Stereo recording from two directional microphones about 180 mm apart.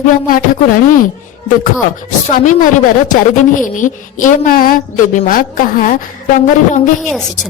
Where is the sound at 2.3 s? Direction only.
45° left (ahead or behind).